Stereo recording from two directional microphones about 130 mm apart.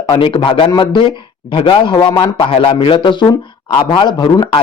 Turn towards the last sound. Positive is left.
turn(degrees=35)  # may be behind; listen again after turning